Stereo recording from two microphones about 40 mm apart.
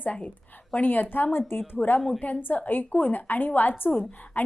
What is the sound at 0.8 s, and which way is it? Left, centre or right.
Speech, left.